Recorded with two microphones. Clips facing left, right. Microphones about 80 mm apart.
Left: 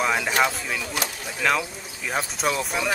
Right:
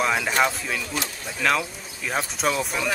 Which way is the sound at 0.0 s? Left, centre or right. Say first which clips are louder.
Even; centre.